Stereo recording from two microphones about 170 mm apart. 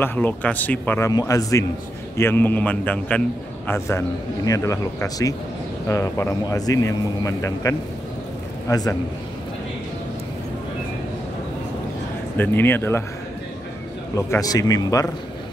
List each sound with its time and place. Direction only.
0.0 s a man's voice: 10° left (ahead or behind)
12.4 s a man's voice: 10° left (ahead or behind)
14.1 s speech: 20° left (ahead or behind)